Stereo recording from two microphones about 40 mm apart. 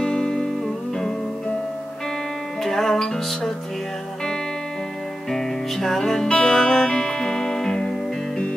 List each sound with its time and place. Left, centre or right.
0.0 s music: centre
2.6 s music: centre
5.3 s music: centre